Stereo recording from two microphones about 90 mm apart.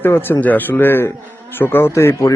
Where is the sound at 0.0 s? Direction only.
25° left (ahead or behind).